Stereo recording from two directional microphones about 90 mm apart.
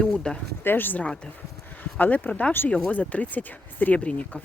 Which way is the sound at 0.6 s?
20° left (ahead or behind).